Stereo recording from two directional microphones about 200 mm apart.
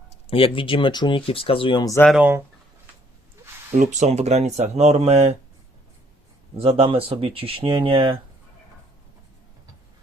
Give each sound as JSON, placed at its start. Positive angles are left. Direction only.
{"t": 0.3, "sound": "speech", "side_deg": 25}
{"t": 2.0, "sound": "speech", "side_deg": -5}
{"t": 3.8, "sound": "speech", "side_deg": -35}
{"t": 6.6, "sound": "speech", "side_deg": -30}